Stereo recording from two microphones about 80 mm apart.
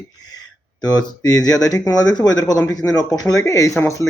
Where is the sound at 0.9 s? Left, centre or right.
Left.